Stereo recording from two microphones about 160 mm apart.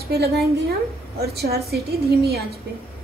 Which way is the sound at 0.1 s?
80° right.